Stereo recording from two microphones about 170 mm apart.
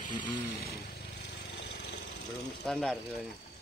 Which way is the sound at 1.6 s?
90° left.